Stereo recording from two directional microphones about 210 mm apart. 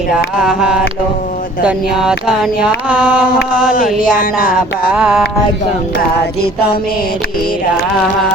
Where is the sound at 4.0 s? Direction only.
40° left (ahead or behind).